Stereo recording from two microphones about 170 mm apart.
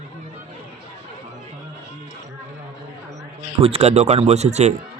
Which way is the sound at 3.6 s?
35° right (ahead or behind).